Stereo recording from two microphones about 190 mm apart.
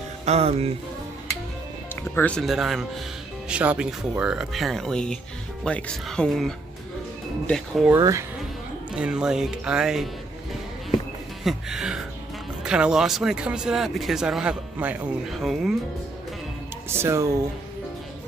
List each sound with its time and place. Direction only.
0.2 s speech: 35° right (ahead or behind)
2.1 s speech: 5° left (ahead or behind)
7.9 s speech: 15° right (ahead or behind)
8.9 s speech: 5° right (ahead or behind)
11.4 s speech: 5° right (ahead or behind)
16.9 s speech: 15° right (ahead or behind)